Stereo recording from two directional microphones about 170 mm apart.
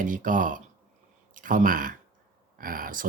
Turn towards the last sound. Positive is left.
turn(degrees=-55)  # may be behind; listen again after turning